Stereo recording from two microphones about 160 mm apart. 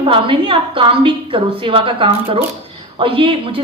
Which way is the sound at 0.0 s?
30° right (ahead or behind).